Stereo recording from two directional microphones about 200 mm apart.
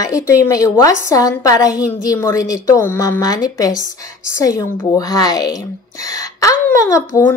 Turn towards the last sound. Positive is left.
turn(degrees=15)  # may be behind; listen again after turning